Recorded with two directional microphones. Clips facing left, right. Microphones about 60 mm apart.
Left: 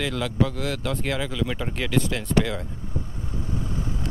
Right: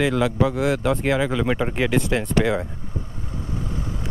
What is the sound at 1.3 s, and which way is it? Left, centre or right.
Speech, right.